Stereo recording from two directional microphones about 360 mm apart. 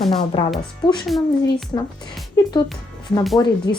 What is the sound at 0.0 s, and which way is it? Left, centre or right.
Speech, centre.